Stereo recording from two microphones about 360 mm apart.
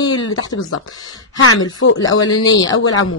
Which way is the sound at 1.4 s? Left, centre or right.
Left.